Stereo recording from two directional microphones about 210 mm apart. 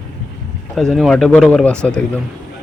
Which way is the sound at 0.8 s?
Centre (ahead or behind).